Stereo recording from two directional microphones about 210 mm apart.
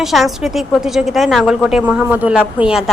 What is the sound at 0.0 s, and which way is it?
A woman's voice, centre (ahead or behind).